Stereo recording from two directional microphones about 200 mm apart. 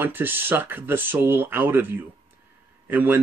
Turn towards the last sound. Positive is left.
turn(degrees=-10)  # may be behind; listen again after turning